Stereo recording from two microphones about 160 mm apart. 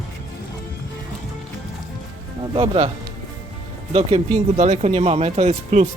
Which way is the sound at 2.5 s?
35° right (ahead or behind).